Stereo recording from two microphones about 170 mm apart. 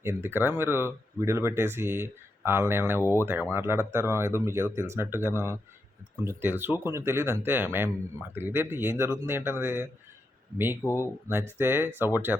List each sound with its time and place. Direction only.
0.0 s speech: 15° right (ahead or behind)
3.0 s speech: 15° left (ahead or behind)
3.5 s speech: 15° right (ahead or behind)
11.0 s speech: 15° right (ahead or behind)